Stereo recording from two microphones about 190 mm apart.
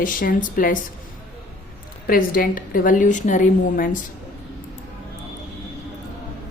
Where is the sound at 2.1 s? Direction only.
50° left (ahead or behind).